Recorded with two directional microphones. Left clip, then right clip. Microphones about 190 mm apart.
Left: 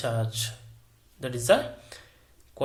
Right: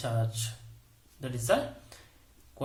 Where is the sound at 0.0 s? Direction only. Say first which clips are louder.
Left 5 dB; 15° left (ahead or behind).